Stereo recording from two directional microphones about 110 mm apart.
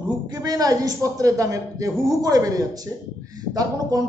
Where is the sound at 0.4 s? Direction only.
35° right (ahead or behind).